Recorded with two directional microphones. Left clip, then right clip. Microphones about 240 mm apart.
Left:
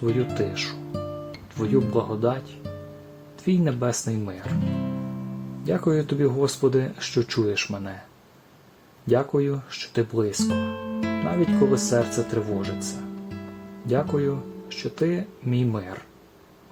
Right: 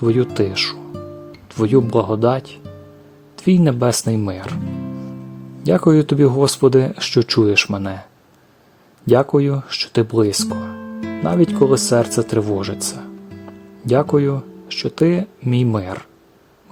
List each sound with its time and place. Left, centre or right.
0.0 s speech: right
4.6 s music: centre
5.6 s speech: right
9.0 s speech: right
10.5 s music: centre
11.2 s speech: right
13.8 s speech: right